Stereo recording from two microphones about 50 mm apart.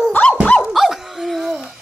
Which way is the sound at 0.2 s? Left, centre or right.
Centre.